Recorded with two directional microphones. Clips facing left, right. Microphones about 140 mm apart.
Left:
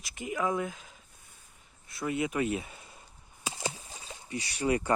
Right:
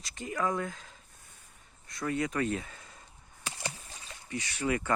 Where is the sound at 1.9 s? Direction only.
10° left (ahead or behind).